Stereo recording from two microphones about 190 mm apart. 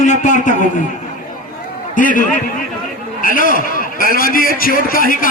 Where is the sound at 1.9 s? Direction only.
45° left (ahead or behind).